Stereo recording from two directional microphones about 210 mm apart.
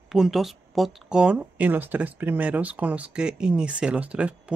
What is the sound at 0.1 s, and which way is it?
Speech, centre (ahead or behind).